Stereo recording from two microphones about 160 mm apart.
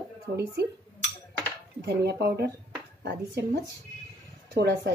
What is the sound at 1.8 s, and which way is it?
Speech, 90° right.